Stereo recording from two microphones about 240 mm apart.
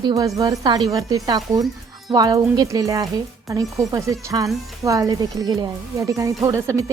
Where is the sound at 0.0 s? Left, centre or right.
Centre.